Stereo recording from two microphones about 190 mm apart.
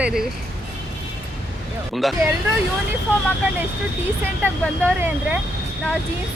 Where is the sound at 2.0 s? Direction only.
Centre (ahead or behind).